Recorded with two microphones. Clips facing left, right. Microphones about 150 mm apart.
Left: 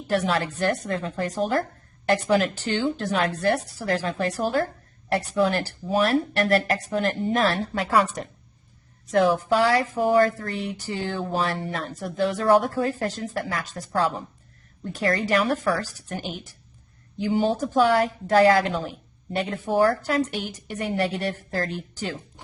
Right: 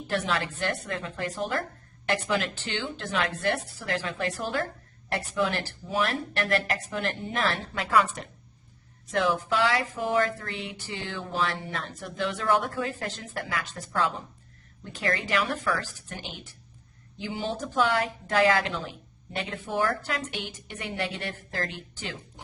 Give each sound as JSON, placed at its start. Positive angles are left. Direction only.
{"t": 0.1, "sound": "speech", "side_deg": 35}